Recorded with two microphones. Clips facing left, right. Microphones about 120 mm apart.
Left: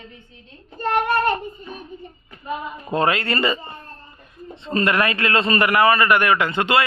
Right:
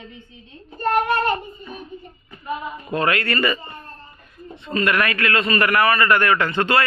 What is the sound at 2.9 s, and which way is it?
A man's voice, 25° left (ahead or behind).